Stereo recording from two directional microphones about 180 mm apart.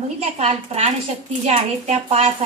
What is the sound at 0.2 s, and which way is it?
A woman's voice, 35° right (ahead or behind).